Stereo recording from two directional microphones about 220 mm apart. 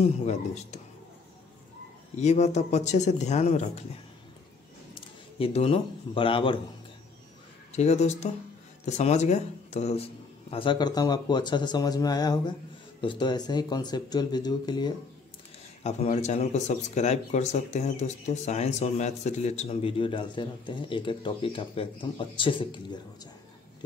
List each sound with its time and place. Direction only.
0.0 s speech: 30° left (ahead or behind)
2.1 s speech: 30° left (ahead or behind)
5.4 s speech: 25° left (ahead or behind)
7.7 s speech: 30° left (ahead or behind)
15.8 s speech: 30° left (ahead or behind)